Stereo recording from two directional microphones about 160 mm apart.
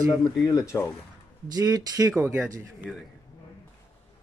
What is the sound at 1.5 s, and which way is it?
Speech, 25° right (ahead or behind).